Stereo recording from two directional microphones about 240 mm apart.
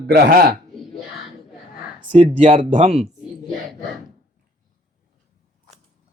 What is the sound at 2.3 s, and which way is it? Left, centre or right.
Speech, right.